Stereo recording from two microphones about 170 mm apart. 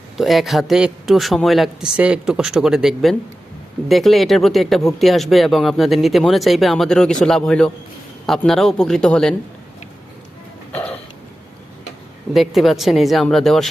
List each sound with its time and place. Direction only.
0.2 s a man's voice: centre (ahead or behind)
10.7 s a sound: 10° left (ahead or behind)
12.3 s a man's voice: centre (ahead or behind)